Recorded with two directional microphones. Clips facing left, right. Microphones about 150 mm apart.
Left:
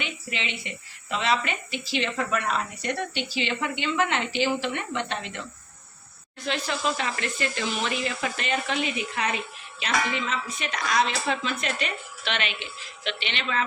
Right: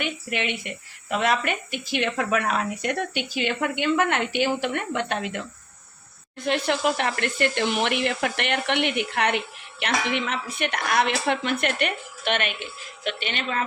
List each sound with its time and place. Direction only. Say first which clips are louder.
0.0 s speech: right 5 dB; 55° right (ahead or behind)
6.4 s speech: right 5 dB; 60° right (ahead or behind)